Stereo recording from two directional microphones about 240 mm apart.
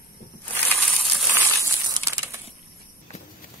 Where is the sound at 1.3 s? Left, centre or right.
Centre.